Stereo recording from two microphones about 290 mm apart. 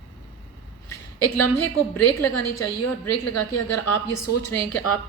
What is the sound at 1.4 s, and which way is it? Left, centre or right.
A woman's voice, left.